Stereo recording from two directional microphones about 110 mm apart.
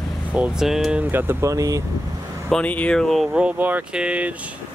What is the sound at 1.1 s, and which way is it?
Speech, 25° right (ahead or behind).